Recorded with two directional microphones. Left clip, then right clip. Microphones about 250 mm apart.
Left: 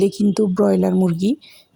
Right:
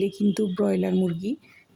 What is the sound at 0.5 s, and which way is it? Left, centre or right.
Speech, centre.